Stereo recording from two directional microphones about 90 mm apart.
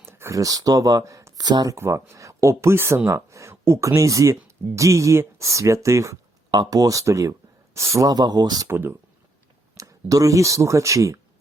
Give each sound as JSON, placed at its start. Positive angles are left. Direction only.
{"t": 0.0, "sound": "speech", "side_deg": -25}
{"t": 1.7, "sound": "speech", "side_deg": -30}
{"t": 6.5, "sound": "speech", "side_deg": -50}
{"t": 7.9, "sound": "speech", "side_deg": -45}
{"t": 8.6, "sound": "speech", "side_deg": -25}
{"t": 9.7, "sound": "speech", "side_deg": -40}